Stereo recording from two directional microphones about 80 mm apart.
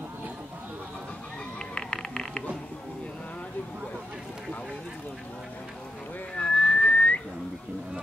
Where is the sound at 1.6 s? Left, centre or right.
Centre.